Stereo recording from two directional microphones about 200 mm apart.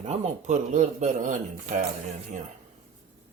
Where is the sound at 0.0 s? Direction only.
35° right (ahead or behind).